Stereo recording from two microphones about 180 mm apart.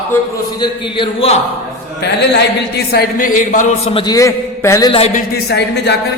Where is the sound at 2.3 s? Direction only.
60° left (ahead or behind); by 3.9 s 45° left (ahead or behind).